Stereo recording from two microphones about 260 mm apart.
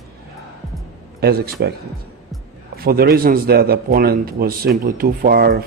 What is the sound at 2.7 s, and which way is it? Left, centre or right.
A man's voice, right.